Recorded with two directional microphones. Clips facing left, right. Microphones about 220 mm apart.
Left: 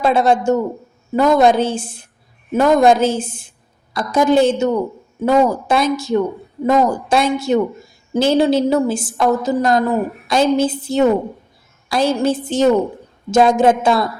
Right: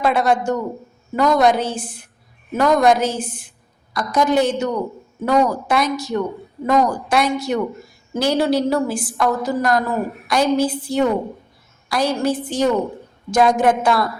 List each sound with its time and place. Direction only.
0.0 s a woman's voice: 25° left (ahead or behind)